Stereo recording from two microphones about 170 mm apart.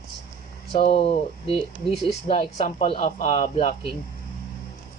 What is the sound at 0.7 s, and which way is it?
Speech, 35° left (ahead or behind).